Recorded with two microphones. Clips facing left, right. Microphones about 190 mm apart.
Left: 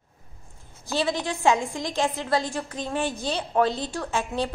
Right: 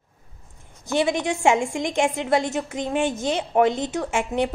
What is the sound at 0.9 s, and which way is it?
A woman's voice, 20° right (ahead or behind).